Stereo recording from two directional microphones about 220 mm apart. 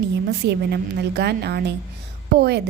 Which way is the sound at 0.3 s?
50° right (ahead or behind).